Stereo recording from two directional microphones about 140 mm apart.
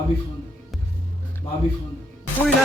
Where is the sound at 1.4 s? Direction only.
20° left (ahead or behind).